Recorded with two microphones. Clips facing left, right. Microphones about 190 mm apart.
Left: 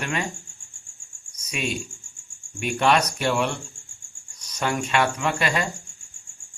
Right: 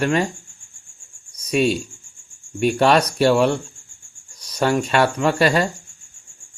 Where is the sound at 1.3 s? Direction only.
35° right (ahead or behind).